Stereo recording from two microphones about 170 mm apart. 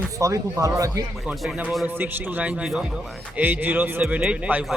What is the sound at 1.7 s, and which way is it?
Speech, 10° right (ahead or behind).